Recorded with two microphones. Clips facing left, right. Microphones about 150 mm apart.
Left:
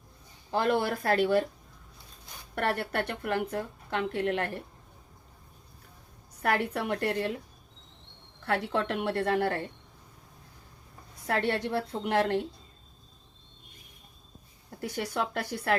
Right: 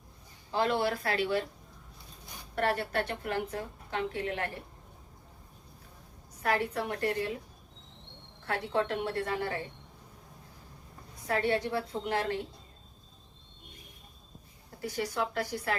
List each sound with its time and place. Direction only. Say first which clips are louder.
0.5 s speech: left 2 dB; 50° left (ahead or behind)
2.6 s a woman's voice: even; 60° left (ahead or behind)
6.4 s a woman's voice: left 2 dB; 60° left (ahead or behind)
8.4 s a woman's voice: left 2 dB; 70° left (ahead or behind)
11.3 s a woman's voice: left 1 dB; 70° left (ahead or behind)
14.8 s a woman's voice: left 1 dB; 60° left (ahead or behind)